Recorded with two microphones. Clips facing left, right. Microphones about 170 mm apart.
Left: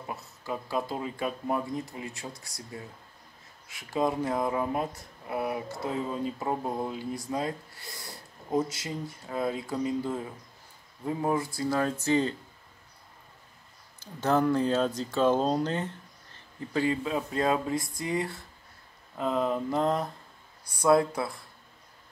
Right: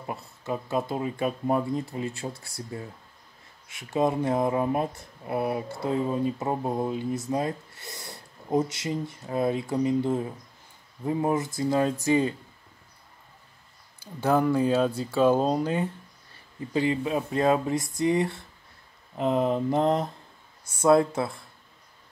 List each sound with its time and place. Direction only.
0.0 s speech: 25° right (ahead or behind)
13.9 s speech: 10° right (ahead or behind); by 21.4 s 25° right (ahead or behind)